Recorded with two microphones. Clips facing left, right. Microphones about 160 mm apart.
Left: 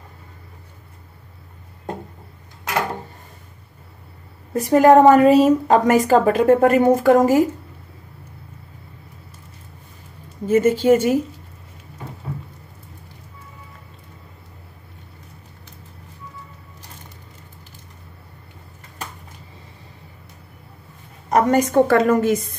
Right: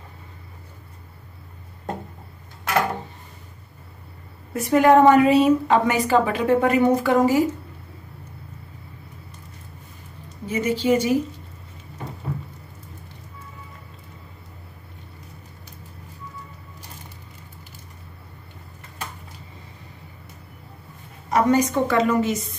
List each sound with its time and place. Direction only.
4.6 s a woman's voice: 35° left (ahead or behind)
10.4 s a woman's voice: 50° left (ahead or behind)
21.3 s a woman's voice: 45° left (ahead or behind)